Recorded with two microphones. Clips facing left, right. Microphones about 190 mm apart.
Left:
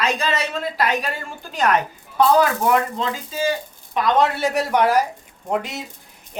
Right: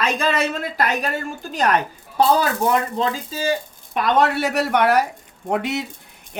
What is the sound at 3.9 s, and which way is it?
A man's voice, 60° right (ahead or behind).